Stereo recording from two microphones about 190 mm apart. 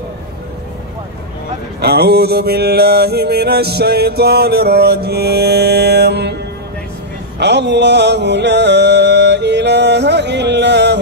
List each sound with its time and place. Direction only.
1.8 s mantra: 55° right (ahead or behind)
7.3 s music: 65° right (ahead or behind)